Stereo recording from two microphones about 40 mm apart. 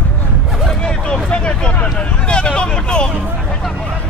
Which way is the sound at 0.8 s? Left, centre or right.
Left.